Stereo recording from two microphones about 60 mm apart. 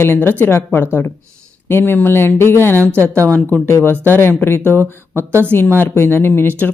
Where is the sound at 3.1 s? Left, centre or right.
Right.